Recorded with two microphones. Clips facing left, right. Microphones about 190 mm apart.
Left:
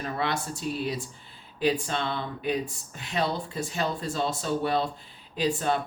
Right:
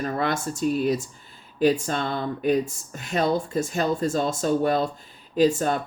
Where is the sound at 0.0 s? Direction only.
45° right (ahead or behind).